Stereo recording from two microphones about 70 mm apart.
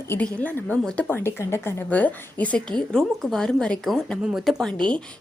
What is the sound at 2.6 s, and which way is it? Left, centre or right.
A woman's voice, centre.